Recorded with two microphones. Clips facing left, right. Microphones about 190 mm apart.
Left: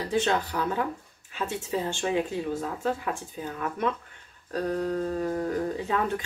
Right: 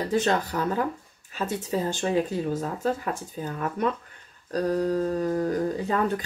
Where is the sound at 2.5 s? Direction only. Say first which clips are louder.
Right 2 dB; 40° right (ahead or behind).